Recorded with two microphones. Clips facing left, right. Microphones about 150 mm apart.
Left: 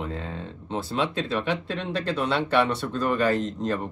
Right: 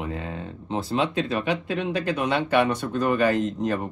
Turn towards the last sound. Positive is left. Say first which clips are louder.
# right 2 dB
turn(degrees=-15)  # may be behind; listen again after turning